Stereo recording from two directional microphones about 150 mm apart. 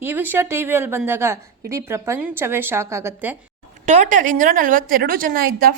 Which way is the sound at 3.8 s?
50° right (ahead or behind).